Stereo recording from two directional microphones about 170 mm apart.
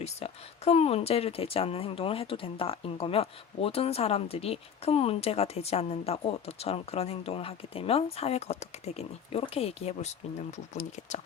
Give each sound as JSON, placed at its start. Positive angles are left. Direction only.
{"t": 0.0, "sound": "speech", "side_deg": 40}